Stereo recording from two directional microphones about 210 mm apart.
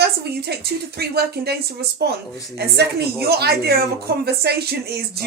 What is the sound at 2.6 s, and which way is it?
A woman's voice, 50° right (ahead or behind).